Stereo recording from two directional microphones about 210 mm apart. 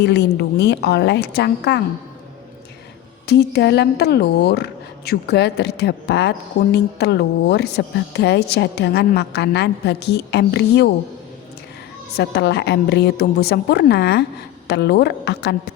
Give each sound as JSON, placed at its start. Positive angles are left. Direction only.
{"t": 0.0, "sound": "speech", "side_deg": 55}
{"t": 3.2, "sound": "speech", "side_deg": 50}
{"t": 12.1, "sound": "speech", "side_deg": 50}